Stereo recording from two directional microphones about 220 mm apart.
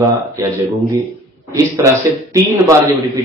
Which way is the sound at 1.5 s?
15° right (ahead or behind).